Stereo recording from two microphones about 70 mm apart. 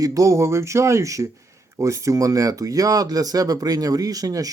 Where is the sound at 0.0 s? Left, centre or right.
Right.